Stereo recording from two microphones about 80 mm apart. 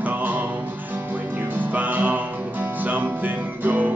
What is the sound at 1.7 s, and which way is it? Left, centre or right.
Music, right.